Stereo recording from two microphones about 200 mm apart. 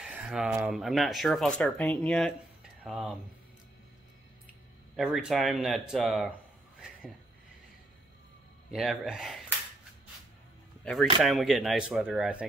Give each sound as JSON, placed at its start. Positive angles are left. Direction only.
{"t": 0.0, "sound": "speech", "side_deg": -5}
{"t": 4.9, "sound": "speech", "side_deg": 0}
{"t": 8.7, "sound": "speech", "side_deg": 0}
{"t": 11.2, "sound": "speech", "side_deg": 0}